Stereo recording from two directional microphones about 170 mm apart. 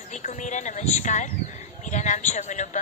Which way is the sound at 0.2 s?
45° left (ahead or behind).